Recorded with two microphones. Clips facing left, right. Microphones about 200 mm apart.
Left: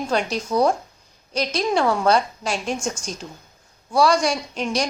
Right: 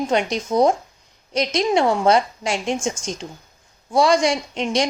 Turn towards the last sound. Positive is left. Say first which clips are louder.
# right 3 dB
turn(degrees=-25)  # may be behind; listen again after turning